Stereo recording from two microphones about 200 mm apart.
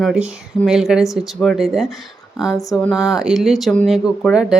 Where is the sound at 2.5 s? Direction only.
15° left (ahead or behind).